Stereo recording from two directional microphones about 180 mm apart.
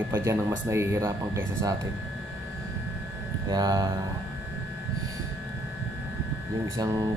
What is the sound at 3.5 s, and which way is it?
Speech, 20° right (ahead or behind).